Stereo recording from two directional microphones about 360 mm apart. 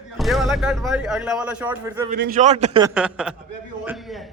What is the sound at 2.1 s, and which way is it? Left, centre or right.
Speech, right.